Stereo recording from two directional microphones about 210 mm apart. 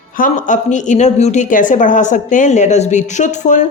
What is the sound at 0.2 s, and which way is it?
Speech, 35° left (ahead or behind).